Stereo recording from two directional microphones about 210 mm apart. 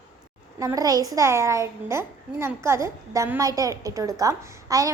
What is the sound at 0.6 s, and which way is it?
A child's voice, 15° right (ahead or behind).